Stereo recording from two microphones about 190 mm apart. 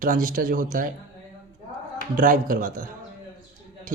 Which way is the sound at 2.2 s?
45° right (ahead or behind).